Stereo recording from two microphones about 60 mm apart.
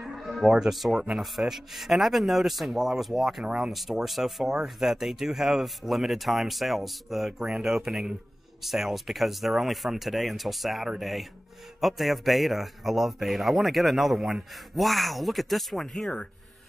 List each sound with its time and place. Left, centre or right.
0.0 s music: centre
0.5 s speech: centre
3.4 s speech: centre
3.7 s speech: centre